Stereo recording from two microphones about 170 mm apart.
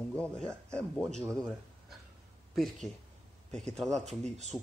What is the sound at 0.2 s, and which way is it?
A man's voice, 5° left (ahead or behind).